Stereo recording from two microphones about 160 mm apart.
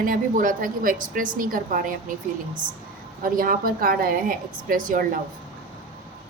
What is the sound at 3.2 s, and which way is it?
A woman's voice, 60° right (ahead or behind).